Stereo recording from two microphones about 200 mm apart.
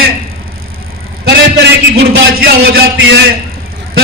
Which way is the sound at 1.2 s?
60° right (ahead or behind).